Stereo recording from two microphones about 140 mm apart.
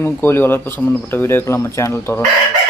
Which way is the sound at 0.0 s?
15° left (ahead or behind).